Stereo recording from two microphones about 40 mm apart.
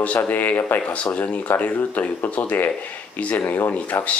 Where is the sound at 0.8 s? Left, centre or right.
Left.